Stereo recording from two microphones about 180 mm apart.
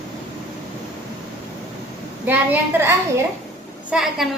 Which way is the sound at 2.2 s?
10° right (ahead or behind).